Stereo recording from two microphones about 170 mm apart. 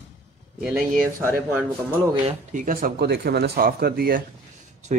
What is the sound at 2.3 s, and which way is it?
Speech, 55° right (ahead or behind).